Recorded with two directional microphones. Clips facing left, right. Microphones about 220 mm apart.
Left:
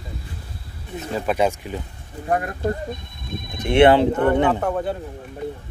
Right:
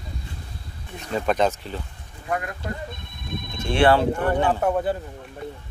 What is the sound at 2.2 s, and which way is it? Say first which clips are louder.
Speech: left 6 dB; 40° left (ahead or behind).